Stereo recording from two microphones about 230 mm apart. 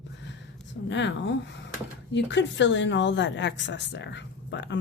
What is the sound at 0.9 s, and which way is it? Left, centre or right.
A woman's voice, left.